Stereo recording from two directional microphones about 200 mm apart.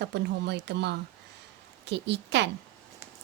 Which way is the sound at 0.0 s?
55° right (ahead or behind).